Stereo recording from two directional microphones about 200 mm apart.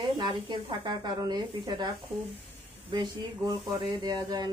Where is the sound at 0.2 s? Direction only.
20° right (ahead or behind).